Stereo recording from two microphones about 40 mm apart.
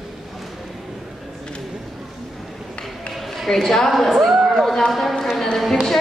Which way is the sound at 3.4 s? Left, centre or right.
Centre.